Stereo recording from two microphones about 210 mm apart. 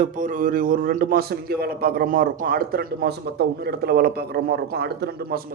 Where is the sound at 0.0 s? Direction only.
40° right (ahead or behind).